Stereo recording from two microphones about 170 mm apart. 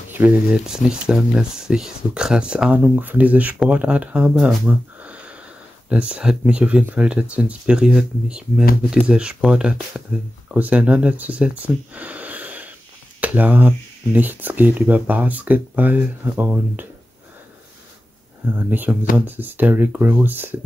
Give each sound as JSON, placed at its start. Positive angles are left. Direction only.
{"t": 0.1, "sound": "speech", "side_deg": -10}
{"t": 18.7, "sound": "speech", "side_deg": -10}